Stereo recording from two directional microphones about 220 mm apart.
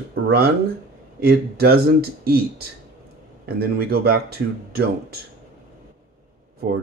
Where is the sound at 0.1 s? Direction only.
45° right (ahead or behind).